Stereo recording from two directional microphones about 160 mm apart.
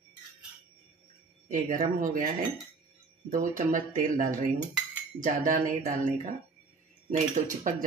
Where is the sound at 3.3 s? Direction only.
55° right (ahead or behind).